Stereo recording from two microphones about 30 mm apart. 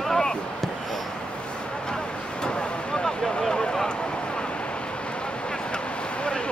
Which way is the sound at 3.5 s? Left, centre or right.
Left.